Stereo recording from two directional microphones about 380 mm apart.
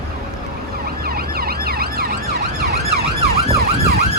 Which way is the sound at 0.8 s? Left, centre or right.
Right.